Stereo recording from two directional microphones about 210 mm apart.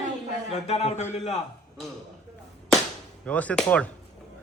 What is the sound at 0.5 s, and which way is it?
Speech, 30° left (ahead or behind).